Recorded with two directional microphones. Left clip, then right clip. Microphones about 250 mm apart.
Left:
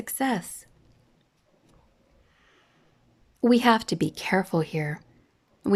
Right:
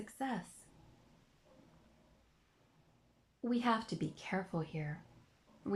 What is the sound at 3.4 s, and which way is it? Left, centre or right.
Speech, left.